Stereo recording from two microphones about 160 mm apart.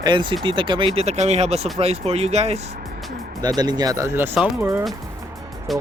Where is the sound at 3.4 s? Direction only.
25° right (ahead or behind).